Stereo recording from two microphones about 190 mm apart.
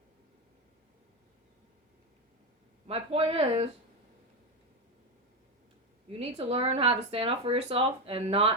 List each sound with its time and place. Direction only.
2.8 s speech: 30° right (ahead or behind)
6.1 s speech: 35° right (ahead or behind)